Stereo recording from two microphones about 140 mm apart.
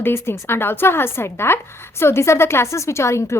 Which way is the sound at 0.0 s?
15° left (ahead or behind).